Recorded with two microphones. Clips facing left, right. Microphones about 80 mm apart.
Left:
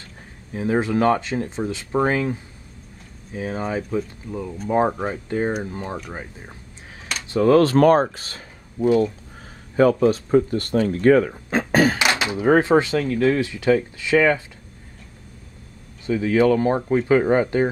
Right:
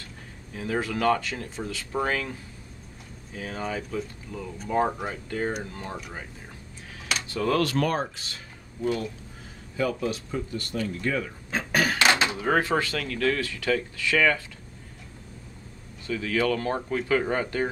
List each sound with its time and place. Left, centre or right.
0.5 s speech: left
3.3 s speech: left
7.2 s speech: left
7.7 s speech: left
11.5 s a sound: left
12.2 s speech: centre
16.1 s speech: left